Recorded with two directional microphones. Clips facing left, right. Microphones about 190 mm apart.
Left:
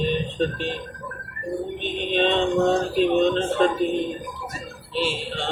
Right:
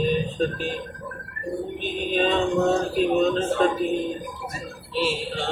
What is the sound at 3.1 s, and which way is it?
Mantra, 5° right (ahead or behind).